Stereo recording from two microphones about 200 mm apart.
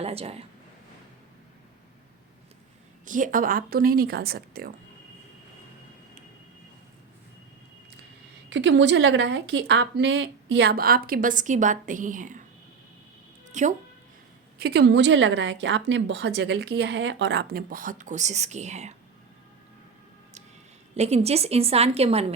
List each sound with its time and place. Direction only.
0.0 s speech: 30° right (ahead or behind)
3.1 s speech: 40° right (ahead or behind)
8.4 s a woman's voice: 65° right (ahead or behind); by 12.4 s 40° right (ahead or behind)
13.5 s speech: 35° right (ahead or behind)
14.6 s a woman's voice: 55° right (ahead or behind); by 18.9 s 35° right (ahead or behind)
20.9 s a woman's voice: 30° right (ahead or behind)